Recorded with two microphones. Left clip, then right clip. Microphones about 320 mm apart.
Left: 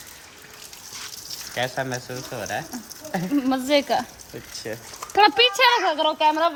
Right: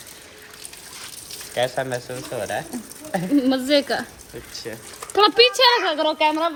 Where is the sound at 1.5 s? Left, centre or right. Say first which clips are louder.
Right 4 dB; centre.